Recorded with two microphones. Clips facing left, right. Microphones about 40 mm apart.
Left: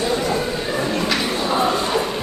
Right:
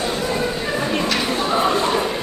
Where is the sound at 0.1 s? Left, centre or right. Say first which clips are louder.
Left 2 dB; centre.